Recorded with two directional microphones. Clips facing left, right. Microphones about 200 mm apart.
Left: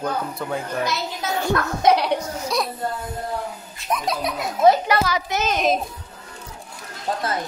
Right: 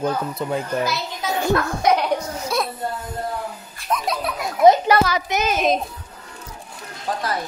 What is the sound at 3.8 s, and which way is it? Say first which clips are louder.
Laughter: right 1 dB; 20° left (ahead or behind).